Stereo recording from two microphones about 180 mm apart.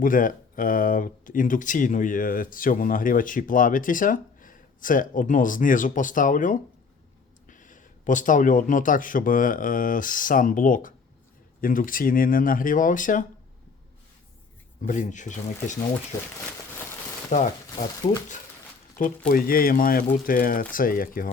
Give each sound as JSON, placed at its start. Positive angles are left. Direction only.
{"t": 0.0, "sound": "speech", "side_deg": 50}
{"t": 14.8, "sound": "speech", "side_deg": 45}
{"t": 17.3, "sound": "speech", "side_deg": 40}
{"t": 19.0, "sound": "speech", "side_deg": 50}